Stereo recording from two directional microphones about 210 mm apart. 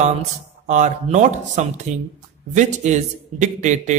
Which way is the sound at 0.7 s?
35° right (ahead or behind).